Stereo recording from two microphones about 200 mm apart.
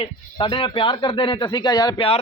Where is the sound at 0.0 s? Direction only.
25° left (ahead or behind).